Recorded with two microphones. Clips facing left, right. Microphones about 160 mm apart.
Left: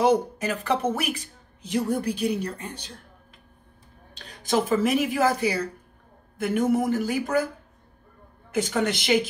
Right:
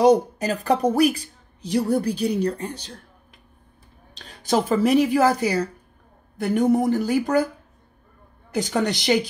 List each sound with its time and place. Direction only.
0.0 s a woman's voice: 40° right (ahead or behind)
4.2 s a woman's voice: 40° right (ahead or behind)
8.5 s a woman's voice: 35° right (ahead or behind)